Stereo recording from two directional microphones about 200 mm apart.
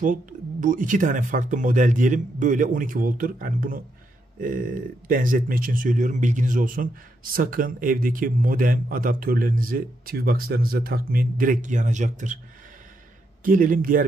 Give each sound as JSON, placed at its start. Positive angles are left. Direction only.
{"t": 0.0, "sound": "speech", "side_deg": -40}
{"t": 13.4, "sound": "speech", "side_deg": -45}